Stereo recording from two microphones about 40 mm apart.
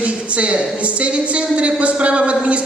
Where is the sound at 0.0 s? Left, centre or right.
Right.